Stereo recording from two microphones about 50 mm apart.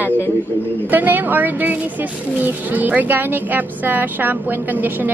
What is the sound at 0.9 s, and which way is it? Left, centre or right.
Speech, right.